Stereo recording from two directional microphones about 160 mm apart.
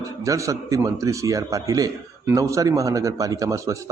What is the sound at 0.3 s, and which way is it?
Speech, 20° right (ahead or behind).